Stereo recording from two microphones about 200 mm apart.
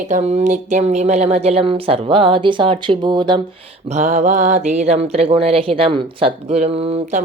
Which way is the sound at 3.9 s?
35° right (ahead or behind).